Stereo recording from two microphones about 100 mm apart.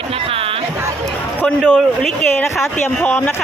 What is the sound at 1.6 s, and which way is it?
Speech, 5° right (ahead or behind).